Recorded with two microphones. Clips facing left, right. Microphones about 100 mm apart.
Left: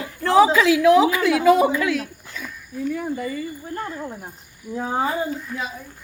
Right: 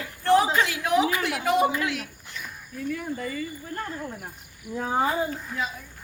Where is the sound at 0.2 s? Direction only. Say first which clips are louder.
Right 1 dB; 85° left.